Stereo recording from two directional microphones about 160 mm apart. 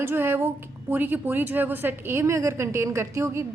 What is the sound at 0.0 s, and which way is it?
A woman's voice, 15° right (ahead or behind).